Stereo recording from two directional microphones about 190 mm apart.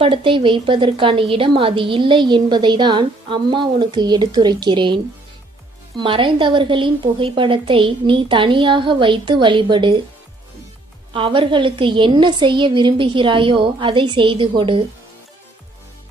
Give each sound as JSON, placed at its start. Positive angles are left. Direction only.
{"t": 0.0, "sound": "a woman's voice", "side_deg": -25}
{"t": 6.0, "sound": "a woman's voice", "side_deg": -25}
{"t": 11.1, "sound": "a woman's voice", "side_deg": -25}